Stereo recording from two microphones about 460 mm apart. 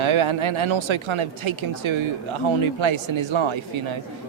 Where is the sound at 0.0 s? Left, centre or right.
Right.